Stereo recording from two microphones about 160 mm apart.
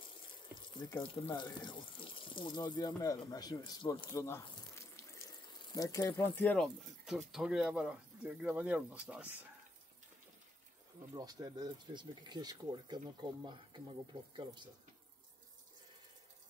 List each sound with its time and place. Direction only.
1.0 s speech: 35° left (ahead or behind)
4.1 s speech: 20° left (ahead or behind)
4.7 s water tap: 15° left (ahead or behind)
5.8 s speech: 25° left (ahead or behind)
6.3 s speech: 10° left (ahead or behind); by 9.5 s 10° right (ahead or behind)
11.1 s speech: 25° right (ahead or behind)